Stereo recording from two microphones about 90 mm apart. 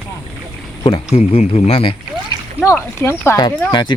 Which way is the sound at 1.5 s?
90° left.